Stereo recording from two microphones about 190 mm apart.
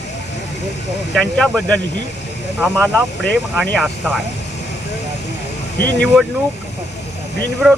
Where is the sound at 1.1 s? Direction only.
Centre (ahead or behind).